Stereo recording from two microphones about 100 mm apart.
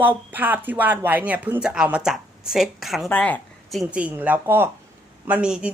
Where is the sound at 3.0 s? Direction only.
15° left (ahead or behind).